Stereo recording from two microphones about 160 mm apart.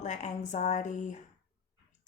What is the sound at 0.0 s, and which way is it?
Speech, 45° left (ahead or behind).